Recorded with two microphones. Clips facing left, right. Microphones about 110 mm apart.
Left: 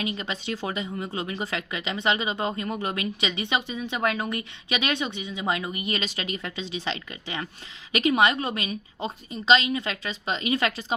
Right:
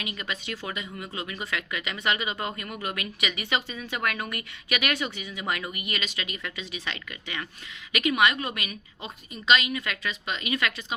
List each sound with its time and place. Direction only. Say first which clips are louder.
0.0 s a woman's voice: left 4 dB; 30° left (ahead or behind)